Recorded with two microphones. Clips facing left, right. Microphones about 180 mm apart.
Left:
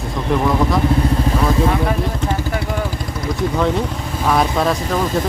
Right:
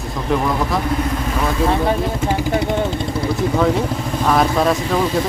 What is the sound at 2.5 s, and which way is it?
Vehicle, 20° right (ahead or behind).